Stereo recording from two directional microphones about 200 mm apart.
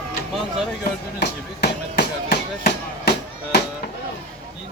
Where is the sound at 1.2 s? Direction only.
55° left (ahead or behind).